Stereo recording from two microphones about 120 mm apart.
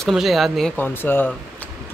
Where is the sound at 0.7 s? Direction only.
15° left (ahead or behind).